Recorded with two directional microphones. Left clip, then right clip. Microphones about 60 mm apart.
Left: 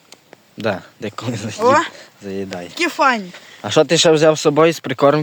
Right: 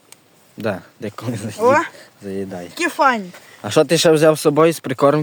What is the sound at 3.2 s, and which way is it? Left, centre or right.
Speech, right.